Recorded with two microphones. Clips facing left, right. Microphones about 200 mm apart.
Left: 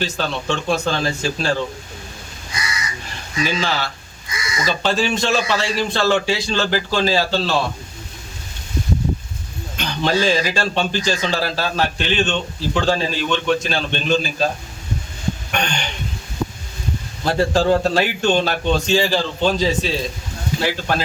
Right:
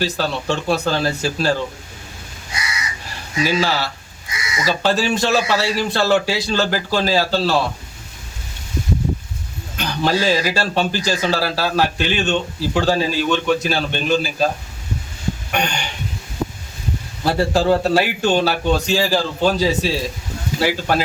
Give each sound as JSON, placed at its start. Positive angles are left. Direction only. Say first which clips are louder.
{"t": 0.0, "sound": "speech", "louder": "right 2 dB", "side_deg": -10}
{"t": 3.4, "sound": "speech", "louder": "right 3 dB", "side_deg": -10}
{"t": 9.7, "sound": "speech", "louder": "even", "side_deg": -10}
{"t": 15.5, "sound": "speech", "louder": "right 2 dB", "side_deg": -10}
{"t": 17.2, "sound": "speech", "louder": "even", "side_deg": -5}